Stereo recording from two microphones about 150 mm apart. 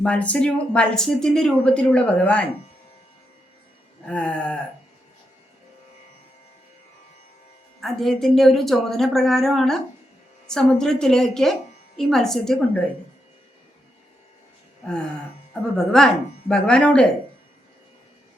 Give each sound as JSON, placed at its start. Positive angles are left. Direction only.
{"t": 0.0, "sound": "speech", "side_deg": 10}
{"t": 4.0, "sound": "speech", "side_deg": 5}
{"t": 7.8, "sound": "a woman's voice", "side_deg": 0}
{"t": 15.7, "sound": "a woman's voice", "side_deg": 5}